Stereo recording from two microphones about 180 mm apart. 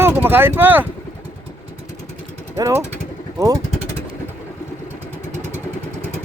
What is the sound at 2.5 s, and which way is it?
Speech, 15° right (ahead or behind).